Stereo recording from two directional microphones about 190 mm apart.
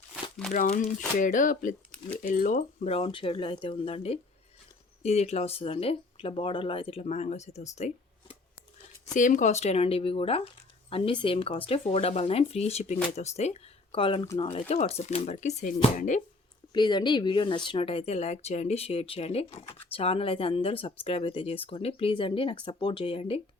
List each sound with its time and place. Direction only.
0.5 s speech: 45° left (ahead or behind)
16.7 s speech: 25° left (ahead or behind)